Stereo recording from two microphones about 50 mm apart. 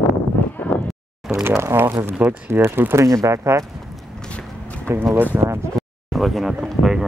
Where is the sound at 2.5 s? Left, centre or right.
Right.